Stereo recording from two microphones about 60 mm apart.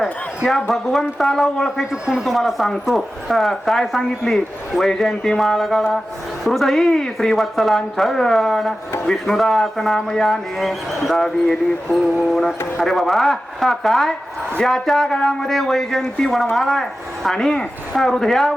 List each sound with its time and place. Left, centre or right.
0.0 s speech: centre
1.9 s a man's voice: centre
2.2 s speech: centre